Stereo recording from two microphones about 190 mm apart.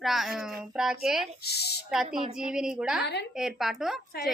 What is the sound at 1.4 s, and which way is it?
Speech, 55° left (ahead or behind).